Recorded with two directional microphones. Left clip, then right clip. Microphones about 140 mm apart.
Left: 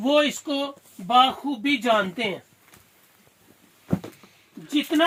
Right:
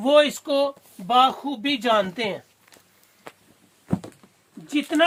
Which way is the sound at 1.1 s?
30° right (ahead or behind).